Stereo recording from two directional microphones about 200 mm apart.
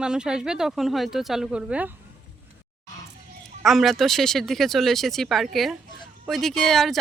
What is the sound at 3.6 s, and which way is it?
Speech, centre (ahead or behind).